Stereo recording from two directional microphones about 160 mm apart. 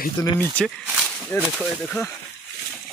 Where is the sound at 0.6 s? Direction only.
5° left (ahead or behind).